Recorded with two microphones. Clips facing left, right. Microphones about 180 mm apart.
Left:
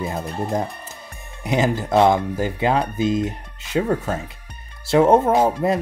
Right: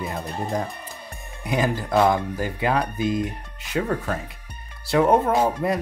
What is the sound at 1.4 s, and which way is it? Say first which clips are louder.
Speech: left 3 dB; 25° left (ahead or behind).